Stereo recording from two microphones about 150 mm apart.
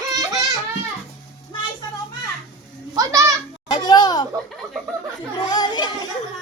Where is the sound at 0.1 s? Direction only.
25° right (ahead or behind).